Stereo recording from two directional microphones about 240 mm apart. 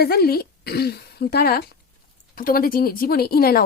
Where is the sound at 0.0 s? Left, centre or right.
Left.